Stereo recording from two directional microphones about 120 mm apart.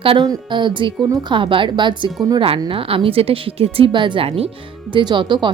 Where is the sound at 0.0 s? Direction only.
50° right (ahead or behind).